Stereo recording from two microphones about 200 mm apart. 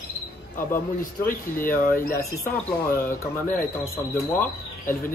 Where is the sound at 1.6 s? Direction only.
45° left (ahead or behind).